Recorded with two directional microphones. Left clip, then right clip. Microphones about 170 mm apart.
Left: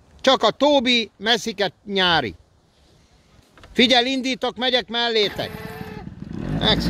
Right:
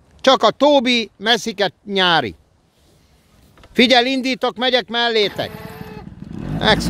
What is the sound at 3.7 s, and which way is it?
Speech, 35° right (ahead or behind).